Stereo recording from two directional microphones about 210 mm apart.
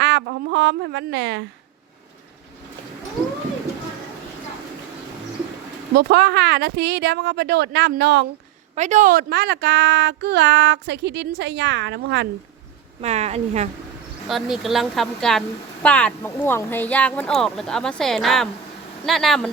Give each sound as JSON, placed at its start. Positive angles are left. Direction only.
{"t": 0.0, "sound": "a sound", "side_deg": -55}
{"t": 5.9, "sound": "speech", "side_deg": -50}
{"t": 8.7, "sound": "a woman's voice", "side_deg": -35}
{"t": 13.0, "sound": "speech", "side_deg": -30}
{"t": 14.3, "sound": "a woman's voice", "side_deg": 0}